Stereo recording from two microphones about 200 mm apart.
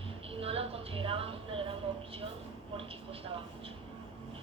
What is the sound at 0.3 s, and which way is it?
Music, 30° right (ahead or behind).